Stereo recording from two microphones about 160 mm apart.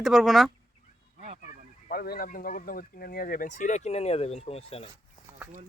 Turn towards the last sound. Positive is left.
turn(degrees=35)  # may be behind; listen again after turning